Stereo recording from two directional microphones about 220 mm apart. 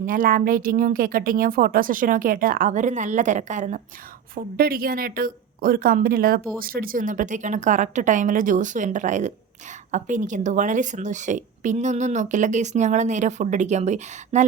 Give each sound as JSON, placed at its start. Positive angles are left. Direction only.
{"t": 0.0, "sound": "a woman's voice", "side_deg": -40}